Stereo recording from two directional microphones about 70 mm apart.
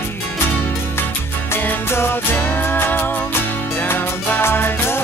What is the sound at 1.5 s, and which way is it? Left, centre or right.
Music, left.